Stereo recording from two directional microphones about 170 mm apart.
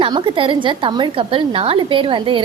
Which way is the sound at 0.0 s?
30° right (ahead or behind).